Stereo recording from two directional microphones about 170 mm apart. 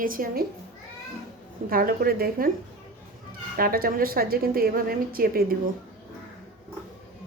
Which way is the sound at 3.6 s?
60° right (ahead or behind).